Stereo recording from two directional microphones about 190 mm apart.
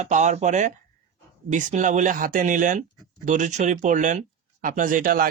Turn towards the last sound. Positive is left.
turn(degrees=-45)  # may be behind; listen again after turning